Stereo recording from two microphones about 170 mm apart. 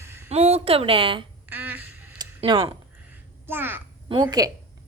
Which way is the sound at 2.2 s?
30° right (ahead or behind).